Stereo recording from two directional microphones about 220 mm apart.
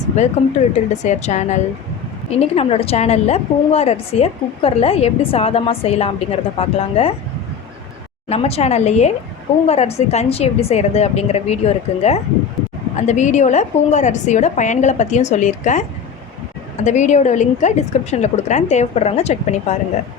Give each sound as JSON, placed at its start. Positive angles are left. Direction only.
{"t": 0.2, "sound": "a woman's voice", "side_deg": 30}
{"t": 8.3, "sound": "a woman's voice", "side_deg": 25}